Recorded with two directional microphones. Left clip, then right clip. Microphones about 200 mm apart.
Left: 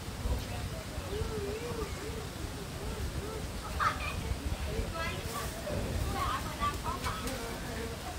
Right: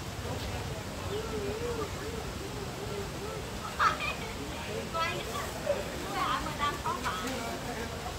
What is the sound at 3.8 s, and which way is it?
Cat, 40° right (ahead or behind).